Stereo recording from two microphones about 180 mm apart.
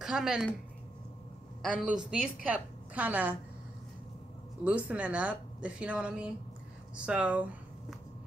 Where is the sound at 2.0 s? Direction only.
5° right (ahead or behind).